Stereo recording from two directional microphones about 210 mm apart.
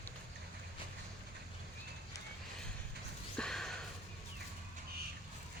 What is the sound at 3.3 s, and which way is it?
Sniff, 5° left (ahead or behind).